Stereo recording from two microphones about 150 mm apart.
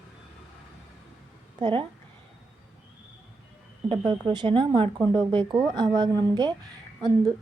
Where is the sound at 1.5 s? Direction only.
30° right (ahead or behind).